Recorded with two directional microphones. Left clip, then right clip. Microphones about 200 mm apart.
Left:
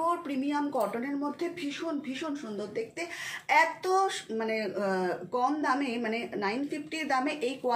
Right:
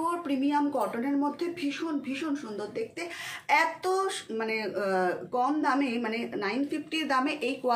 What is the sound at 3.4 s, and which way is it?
A woman's voice, 20° right (ahead or behind).